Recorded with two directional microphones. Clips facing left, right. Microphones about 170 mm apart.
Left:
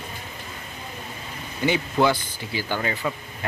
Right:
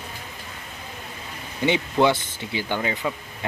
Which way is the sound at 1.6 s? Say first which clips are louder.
Right 1 dB; 25° right (ahead or behind).